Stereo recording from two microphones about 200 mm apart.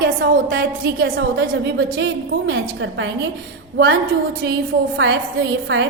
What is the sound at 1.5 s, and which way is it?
A woman's voice, 65° right (ahead or behind).